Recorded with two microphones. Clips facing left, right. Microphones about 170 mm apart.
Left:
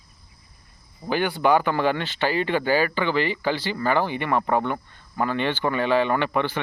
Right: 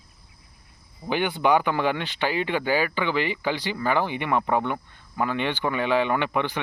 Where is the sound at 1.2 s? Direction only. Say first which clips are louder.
Left 1 dB; 15° right (ahead or behind).